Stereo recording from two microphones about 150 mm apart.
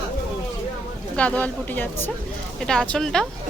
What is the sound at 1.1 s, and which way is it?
Speech, 10° left (ahead or behind).